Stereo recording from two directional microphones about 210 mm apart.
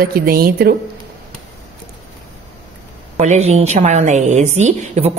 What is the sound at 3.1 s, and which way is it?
A woman's voice, 30° right (ahead or behind).